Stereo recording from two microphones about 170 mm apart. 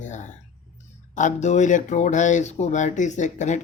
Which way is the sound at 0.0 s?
45° left (ahead or behind).